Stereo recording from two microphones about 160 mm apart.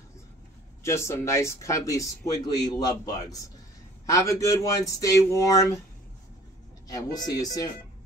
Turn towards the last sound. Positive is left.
turn(degrees=20)  # may be behind; listen again after turning